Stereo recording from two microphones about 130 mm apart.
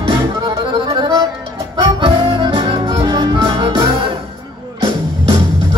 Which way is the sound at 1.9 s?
35° right (ahead or behind).